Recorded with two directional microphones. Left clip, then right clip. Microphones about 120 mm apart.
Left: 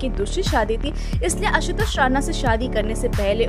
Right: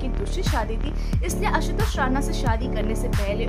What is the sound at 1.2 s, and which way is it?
Music, 45° left (ahead or behind).